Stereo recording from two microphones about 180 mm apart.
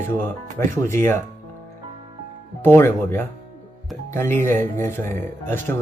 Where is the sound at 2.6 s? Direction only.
15° left (ahead or behind).